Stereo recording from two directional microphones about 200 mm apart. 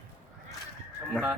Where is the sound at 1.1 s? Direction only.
5° right (ahead or behind).